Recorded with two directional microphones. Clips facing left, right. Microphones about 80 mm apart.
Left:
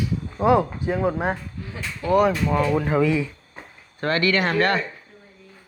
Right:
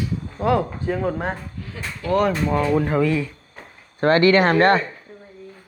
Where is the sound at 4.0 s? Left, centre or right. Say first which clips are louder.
Right 6 dB; right.